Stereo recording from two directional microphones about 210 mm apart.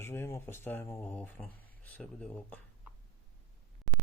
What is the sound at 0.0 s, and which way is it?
Speech, 10° left (ahead or behind).